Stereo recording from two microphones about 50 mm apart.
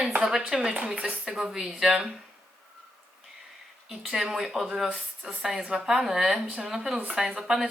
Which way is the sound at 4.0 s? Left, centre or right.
Centre.